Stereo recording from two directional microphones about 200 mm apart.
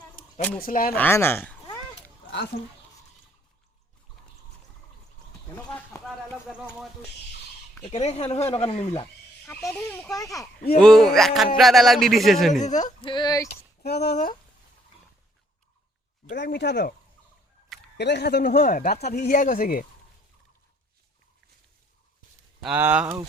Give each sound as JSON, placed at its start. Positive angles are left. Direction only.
{"t": 0.6, "sound": "speech", "side_deg": 45}
{"t": 0.9, "sound": "speech", "side_deg": 10}
{"t": 2.5, "sound": "speech", "side_deg": 50}
{"t": 5.5, "sound": "speech", "side_deg": 10}
{"t": 7.9, "sound": "speech", "side_deg": 30}
{"t": 9.5, "sound": "speech", "side_deg": 5}
{"t": 10.8, "sound": "speech", "side_deg": 0}
{"t": 12.5, "sound": "speech", "side_deg": 35}
{"t": 13.0, "sound": "speech", "side_deg": 25}
{"t": 13.8, "sound": "speech", "side_deg": 50}
{"t": 16.3, "sound": "speech", "side_deg": 60}
{"t": 17.9, "sound": "speech", "side_deg": 60}
{"t": 22.6, "sound": "speech", "side_deg": -10}